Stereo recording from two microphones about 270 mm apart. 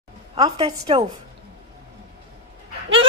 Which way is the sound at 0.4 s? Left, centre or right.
Centre.